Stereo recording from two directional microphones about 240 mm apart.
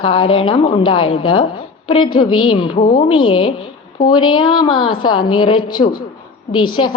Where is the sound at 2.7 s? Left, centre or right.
Left.